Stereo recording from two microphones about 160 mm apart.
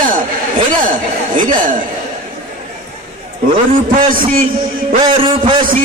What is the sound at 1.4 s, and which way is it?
Speech, 55° right (ahead or behind).